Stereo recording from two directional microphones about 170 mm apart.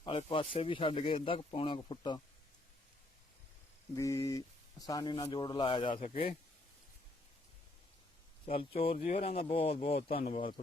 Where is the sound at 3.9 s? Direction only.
20° left (ahead or behind); by 6.3 s 35° left (ahead or behind).